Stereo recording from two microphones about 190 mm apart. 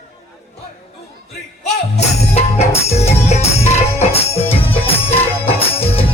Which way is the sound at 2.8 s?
35° left (ahead or behind).